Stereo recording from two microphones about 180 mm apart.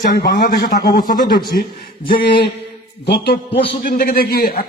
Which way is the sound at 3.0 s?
60° left (ahead or behind).